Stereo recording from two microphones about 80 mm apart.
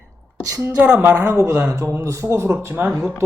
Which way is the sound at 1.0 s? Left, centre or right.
Right.